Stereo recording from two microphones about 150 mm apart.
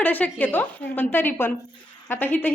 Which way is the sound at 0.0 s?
10° left (ahead or behind).